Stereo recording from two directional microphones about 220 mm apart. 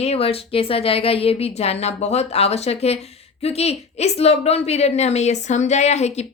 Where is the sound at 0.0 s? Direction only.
25° left (ahead or behind).